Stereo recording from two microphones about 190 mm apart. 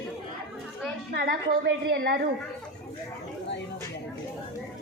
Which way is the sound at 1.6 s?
55° right (ahead or behind).